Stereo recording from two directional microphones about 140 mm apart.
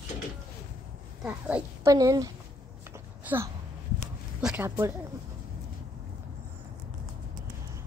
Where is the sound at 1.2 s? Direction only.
10° right (ahead or behind).